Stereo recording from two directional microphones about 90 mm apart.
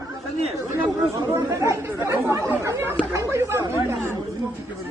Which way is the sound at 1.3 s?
35° right (ahead or behind).